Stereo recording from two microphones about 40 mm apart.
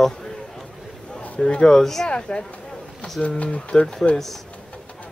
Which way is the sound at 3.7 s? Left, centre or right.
Centre.